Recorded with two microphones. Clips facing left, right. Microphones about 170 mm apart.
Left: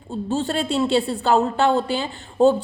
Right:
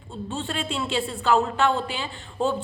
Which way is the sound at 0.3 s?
40° left (ahead or behind).